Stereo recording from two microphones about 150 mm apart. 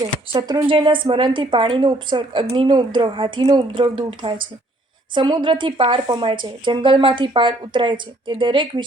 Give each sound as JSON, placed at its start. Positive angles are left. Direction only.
{"t": 0.0, "sound": "speech", "side_deg": -25}